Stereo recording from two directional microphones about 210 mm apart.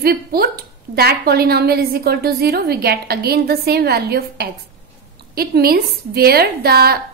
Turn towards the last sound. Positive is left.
turn(degrees=-50)  # may be behind; listen again after turning